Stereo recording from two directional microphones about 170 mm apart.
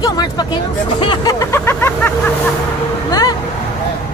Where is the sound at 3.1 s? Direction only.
20° left (ahead or behind).